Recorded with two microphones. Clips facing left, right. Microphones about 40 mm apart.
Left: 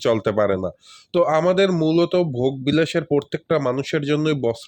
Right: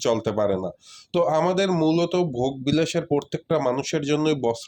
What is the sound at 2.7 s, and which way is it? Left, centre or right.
Speech, left.